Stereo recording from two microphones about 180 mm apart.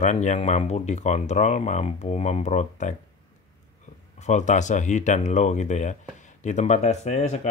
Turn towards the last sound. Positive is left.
turn(degrees=40)  # may be behind; listen again after turning